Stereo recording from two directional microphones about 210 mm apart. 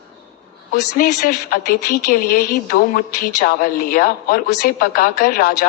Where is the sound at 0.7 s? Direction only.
45° left (ahead or behind).